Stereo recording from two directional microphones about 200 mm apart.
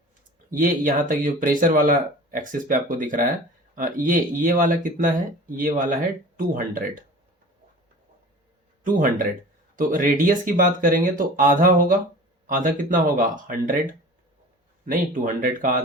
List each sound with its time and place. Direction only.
0.5 s speech: 45° right (ahead or behind)
8.8 s speech: 45° right (ahead or behind)